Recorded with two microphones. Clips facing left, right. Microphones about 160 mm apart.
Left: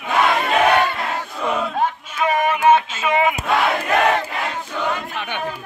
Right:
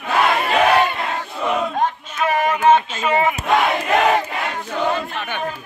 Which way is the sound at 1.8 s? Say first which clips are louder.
Even; 10° left (ahead or behind).